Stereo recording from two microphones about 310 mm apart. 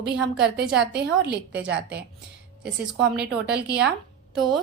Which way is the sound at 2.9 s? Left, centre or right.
Right.